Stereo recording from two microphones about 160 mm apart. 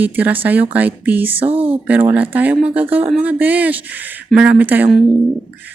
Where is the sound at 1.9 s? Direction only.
10° right (ahead or behind).